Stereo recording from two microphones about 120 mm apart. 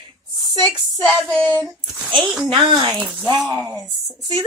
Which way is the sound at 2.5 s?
40° right (ahead or behind).